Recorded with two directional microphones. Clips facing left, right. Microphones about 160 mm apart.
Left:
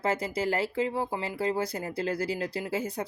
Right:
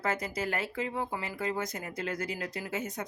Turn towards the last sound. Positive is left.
turn(degrees=30)  # may be behind; listen again after turning